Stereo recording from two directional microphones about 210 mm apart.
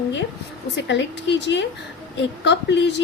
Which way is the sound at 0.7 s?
55° left (ahead or behind).